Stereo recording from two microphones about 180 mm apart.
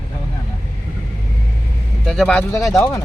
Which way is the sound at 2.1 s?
5° left (ahead or behind).